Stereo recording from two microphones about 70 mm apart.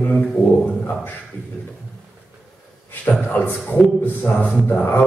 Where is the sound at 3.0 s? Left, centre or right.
Left.